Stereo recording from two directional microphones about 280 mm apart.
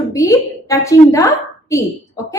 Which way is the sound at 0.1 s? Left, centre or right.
Centre.